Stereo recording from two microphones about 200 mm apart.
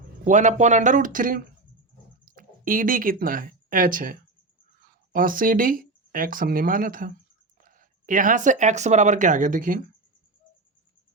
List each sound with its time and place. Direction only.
0.3 s speech: 35° right (ahead or behind)